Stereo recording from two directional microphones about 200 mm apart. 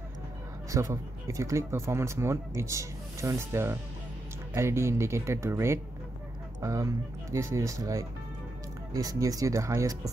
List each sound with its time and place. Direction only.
0.7 s speech: 15° right (ahead or behind)